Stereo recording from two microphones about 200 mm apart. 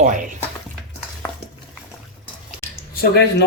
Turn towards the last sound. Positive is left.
turn(degrees=55)  # may be behind; listen again after turning